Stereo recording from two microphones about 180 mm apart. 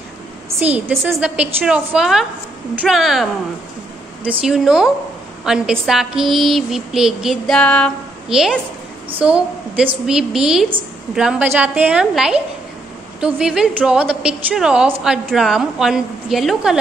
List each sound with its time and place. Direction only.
0.6 s a woman's voice: 10° right (ahead or behind)